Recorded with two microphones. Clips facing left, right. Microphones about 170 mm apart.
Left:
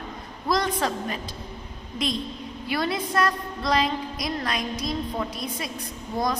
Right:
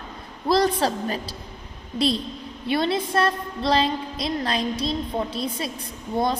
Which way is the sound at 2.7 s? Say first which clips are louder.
Right 4 dB; 25° right (ahead or behind).